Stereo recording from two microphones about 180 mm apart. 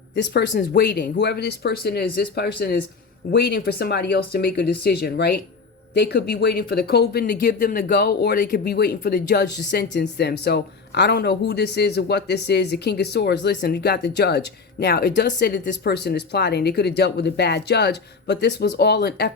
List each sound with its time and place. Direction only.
0.2 s speech: 70° left (ahead or behind)